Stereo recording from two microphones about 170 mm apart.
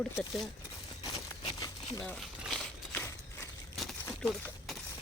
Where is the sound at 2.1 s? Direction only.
Centre (ahead or behind).